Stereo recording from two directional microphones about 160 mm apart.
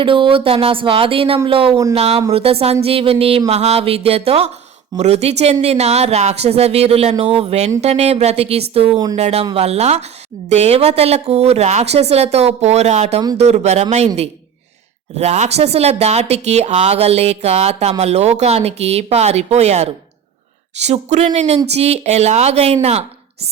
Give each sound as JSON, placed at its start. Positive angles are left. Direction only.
{"t": 0.0, "sound": "a woman's voice", "side_deg": -35}
{"t": 15.2, "sound": "a woman's voice", "side_deg": -45}